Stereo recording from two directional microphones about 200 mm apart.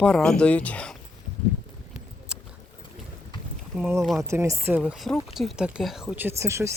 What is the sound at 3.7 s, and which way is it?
Speech, 10° right (ahead or behind).